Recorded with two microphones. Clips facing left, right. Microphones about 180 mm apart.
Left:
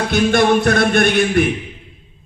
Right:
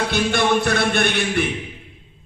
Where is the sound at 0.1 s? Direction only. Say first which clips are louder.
Left 8 dB; 50° left (ahead or behind).